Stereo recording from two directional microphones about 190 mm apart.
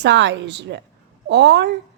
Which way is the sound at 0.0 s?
70° right (ahead or behind).